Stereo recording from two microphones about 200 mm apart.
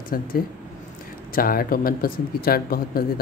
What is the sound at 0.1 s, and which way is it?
Speech, 45° left (ahead or behind).